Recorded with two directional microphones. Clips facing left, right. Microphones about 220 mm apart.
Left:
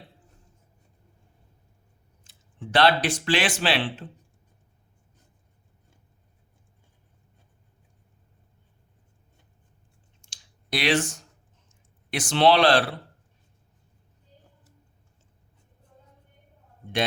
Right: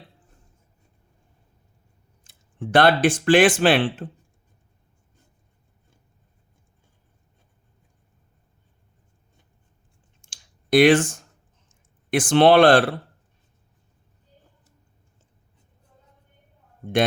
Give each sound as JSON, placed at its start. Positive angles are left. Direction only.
{"t": 2.2, "sound": "speech", "side_deg": -50}
{"t": 10.2, "sound": "clicking", "side_deg": -50}
{"t": 11.7, "sound": "speech", "side_deg": -50}